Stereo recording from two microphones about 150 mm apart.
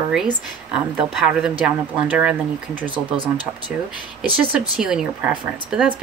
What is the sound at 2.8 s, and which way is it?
Speech, 35° right (ahead or behind).